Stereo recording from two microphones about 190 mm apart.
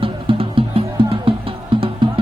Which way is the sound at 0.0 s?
30° right (ahead or behind).